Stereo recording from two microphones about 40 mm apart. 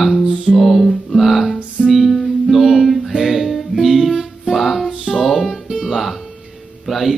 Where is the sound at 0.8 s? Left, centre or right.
Centre.